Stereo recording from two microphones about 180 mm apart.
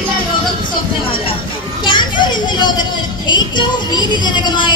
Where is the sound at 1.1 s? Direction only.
30° left (ahead or behind).